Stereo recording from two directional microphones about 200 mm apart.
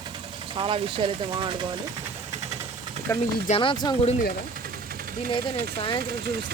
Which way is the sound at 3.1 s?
15° left (ahead or behind).